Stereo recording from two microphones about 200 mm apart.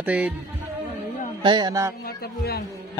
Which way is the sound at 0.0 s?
5° right (ahead or behind).